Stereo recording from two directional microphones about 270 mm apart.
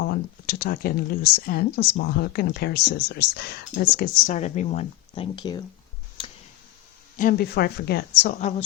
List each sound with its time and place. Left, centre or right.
0.0 s speech: left; by 5.6 s centre
7.2 s speech: left